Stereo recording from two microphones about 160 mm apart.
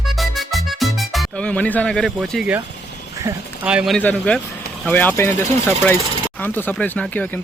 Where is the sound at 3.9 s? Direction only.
10° left (ahead or behind).